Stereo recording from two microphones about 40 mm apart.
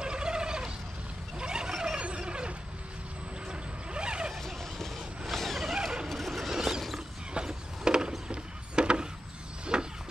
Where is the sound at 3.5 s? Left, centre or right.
Right.